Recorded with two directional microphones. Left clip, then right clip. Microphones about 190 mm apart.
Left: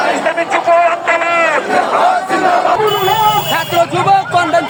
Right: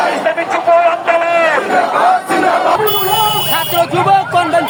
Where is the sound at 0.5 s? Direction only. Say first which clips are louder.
Even; 15° left (ahead or behind).